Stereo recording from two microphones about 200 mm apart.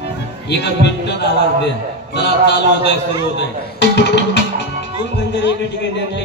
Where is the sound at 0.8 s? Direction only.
60° left (ahead or behind).